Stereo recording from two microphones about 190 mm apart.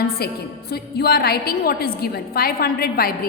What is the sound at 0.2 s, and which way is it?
A woman's voice, 55° left (ahead or behind).